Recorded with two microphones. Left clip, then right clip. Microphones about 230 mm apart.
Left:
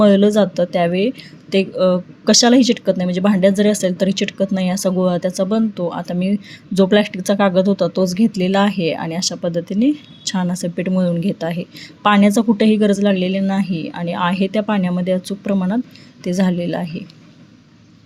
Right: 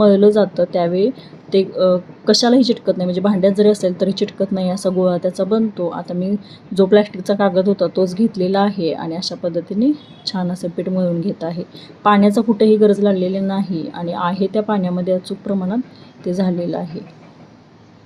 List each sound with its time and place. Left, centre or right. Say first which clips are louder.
0.2 s speech: right 2 dB; left
0.6 s speech: right 1 dB; left
10.8 s speech: right 1 dB; left